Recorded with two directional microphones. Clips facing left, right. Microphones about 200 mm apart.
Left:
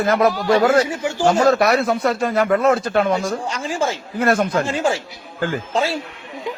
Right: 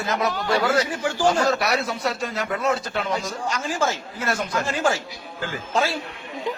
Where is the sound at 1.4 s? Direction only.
50° left (ahead or behind).